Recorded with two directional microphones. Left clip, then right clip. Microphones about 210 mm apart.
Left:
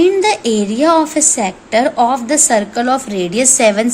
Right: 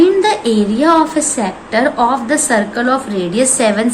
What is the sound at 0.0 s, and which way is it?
A woman's voice, 45° left (ahead or behind).